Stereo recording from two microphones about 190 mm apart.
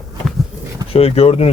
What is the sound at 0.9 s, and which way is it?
Speech, 30° left (ahead or behind).